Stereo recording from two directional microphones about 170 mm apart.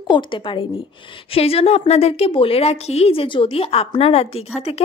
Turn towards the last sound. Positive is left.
turn(degrees=35)  # may be behind; listen again after turning